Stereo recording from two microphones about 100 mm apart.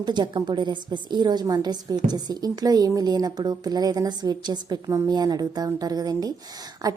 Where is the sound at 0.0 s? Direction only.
50° right (ahead or behind).